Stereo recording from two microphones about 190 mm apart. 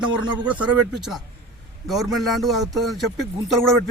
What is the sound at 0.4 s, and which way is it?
Speech, 5° right (ahead or behind).